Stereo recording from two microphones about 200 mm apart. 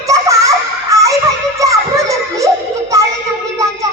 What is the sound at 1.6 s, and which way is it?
Children playing, 15° right (ahead or behind).